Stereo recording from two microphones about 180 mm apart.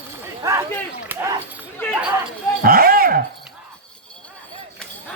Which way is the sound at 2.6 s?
55° right (ahead or behind).